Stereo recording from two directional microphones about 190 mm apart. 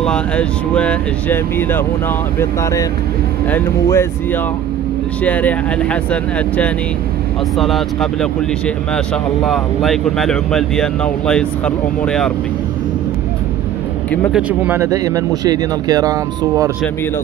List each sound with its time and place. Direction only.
0.0 s speech: 5° left (ahead or behind)
14.3 s speech: 10° right (ahead or behind)